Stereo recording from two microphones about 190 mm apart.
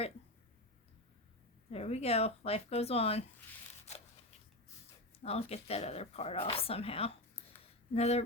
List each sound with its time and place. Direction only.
1.7 s speech: 35° left (ahead or behind)
5.2 s speech: 35° left (ahead or behind)